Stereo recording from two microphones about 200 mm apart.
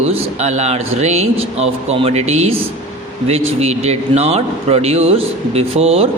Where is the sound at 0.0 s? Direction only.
35° right (ahead or behind).